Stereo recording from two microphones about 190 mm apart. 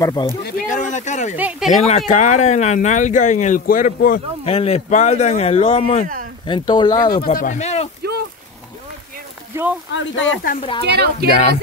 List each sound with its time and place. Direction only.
0.0 s speech: 20° left (ahead or behind)
0.5 s a sound: 40° left (ahead or behind)
1.3 s speech: 5° right (ahead or behind)
1.8 s speech: 35° left (ahead or behind)
4.5 s speech: 35° left (ahead or behind)
7.1 s speech: 50° left (ahead or behind)
8.0 s a sound: 55° right (ahead or behind)
9.9 s speech: 80° left
10.6 s speech: 30° left (ahead or behind)
10.9 s a woman's voice: 60° right (ahead or behind)